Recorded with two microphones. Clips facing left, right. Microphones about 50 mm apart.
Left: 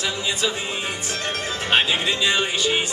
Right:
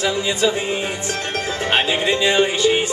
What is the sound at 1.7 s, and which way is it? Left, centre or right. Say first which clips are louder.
Music: right 2 dB; right.